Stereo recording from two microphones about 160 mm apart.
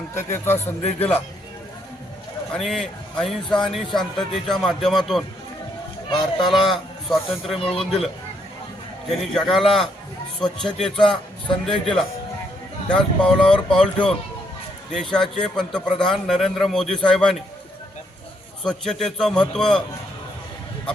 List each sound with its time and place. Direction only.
0.1 s speech: 15° left (ahead or behind)
2.5 s a man's voice: centre (ahead or behind)
6.7 s a man's voice: centre (ahead or behind)
18.6 s a man's voice: centre (ahead or behind)